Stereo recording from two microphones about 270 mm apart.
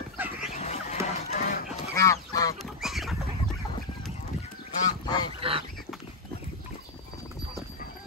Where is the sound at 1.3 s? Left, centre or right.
Left.